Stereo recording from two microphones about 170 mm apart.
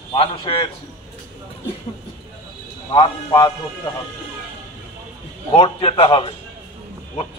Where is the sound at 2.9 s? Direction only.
30° left (ahead or behind).